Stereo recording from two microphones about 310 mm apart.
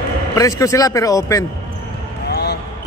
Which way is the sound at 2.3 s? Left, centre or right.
Left.